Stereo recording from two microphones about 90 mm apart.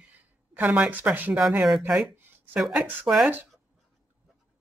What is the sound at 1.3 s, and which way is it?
Speech, 5° right (ahead or behind).